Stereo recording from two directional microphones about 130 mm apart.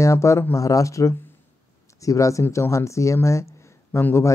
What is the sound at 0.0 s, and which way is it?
Speech, 25° left (ahead or behind).